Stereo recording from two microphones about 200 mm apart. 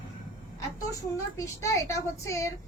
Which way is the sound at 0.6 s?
15° left (ahead or behind).